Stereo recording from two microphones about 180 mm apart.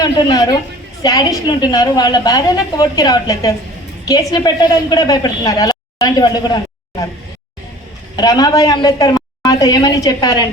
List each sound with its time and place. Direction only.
0.0 s a woman's voice: 20° left (ahead or behind)
8.1 s a woman's voice: 20° left (ahead or behind)